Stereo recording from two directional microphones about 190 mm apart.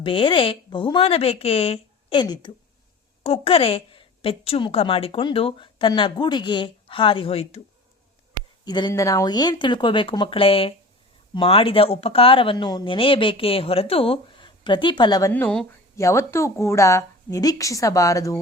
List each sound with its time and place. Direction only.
0.0 s a woman's voice: 25° left (ahead or behind)
8.6 s a woman's voice: 20° left (ahead or behind)
15.3 s a woman's voice: 10° left (ahead or behind)